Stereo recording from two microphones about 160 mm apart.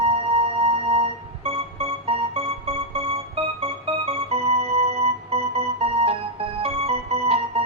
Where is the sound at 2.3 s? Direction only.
40° right (ahead or behind).